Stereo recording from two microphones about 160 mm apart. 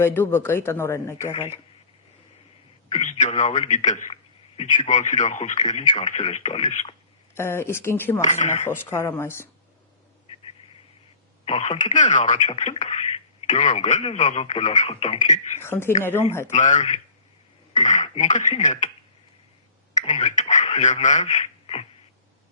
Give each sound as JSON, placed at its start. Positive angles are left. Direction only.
{"t": 0.0, "sound": "speech", "side_deg": 15}
{"t": 2.9, "sound": "a man's voice", "side_deg": 50}
{"t": 7.3, "sound": "speech", "side_deg": 15}
{"t": 8.2, "sound": "a man's voice", "side_deg": 45}
{"t": 8.6, "sound": "speech", "side_deg": 15}
{"t": 11.4, "sound": "a man's voice", "side_deg": 45}
{"t": 15.6, "sound": "speech", "side_deg": 15}
{"t": 16.5, "sound": "a man's voice", "side_deg": 50}
{"t": 20.1, "sound": "a man's voice", "side_deg": 45}